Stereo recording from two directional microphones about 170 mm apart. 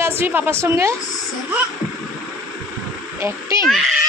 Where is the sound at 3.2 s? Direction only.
20° right (ahead or behind).